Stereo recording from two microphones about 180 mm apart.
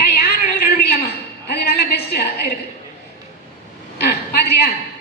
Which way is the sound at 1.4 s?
60° left (ahead or behind).